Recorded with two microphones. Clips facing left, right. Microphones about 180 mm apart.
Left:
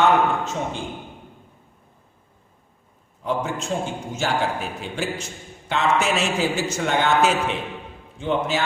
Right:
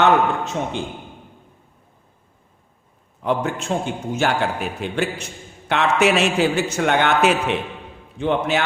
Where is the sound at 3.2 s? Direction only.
65° right (ahead or behind).